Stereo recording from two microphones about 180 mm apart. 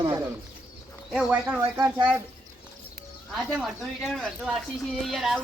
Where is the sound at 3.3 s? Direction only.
Centre (ahead or behind).